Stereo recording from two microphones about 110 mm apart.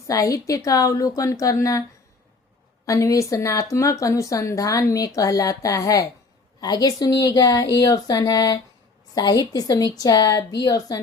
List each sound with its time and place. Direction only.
0.1 s speech: 30° left (ahead or behind)
2.8 s speech: 30° left (ahead or behind)